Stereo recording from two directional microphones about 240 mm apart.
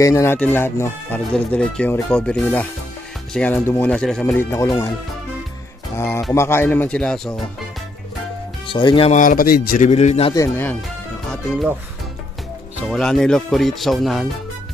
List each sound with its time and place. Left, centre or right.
0.0 s speech: centre
5.9 s speech: centre
8.6 s speech: centre
10.3 s speech: centre
12.8 s speech: centre